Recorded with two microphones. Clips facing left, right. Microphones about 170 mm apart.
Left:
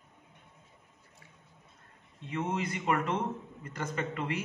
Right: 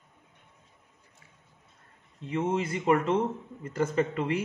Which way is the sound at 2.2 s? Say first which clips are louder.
Right 5 dB; 30° right (ahead or behind).